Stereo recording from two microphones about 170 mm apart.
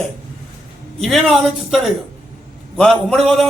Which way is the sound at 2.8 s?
Centre (ahead or behind).